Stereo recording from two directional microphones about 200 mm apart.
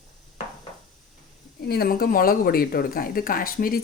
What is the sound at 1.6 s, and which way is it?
Speech, 50° left (ahead or behind).